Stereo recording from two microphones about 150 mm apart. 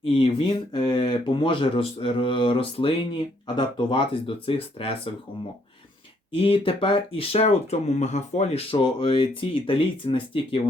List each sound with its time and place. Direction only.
0.0 s speech: 35° left (ahead or behind)
6.3 s speech: 35° left (ahead or behind)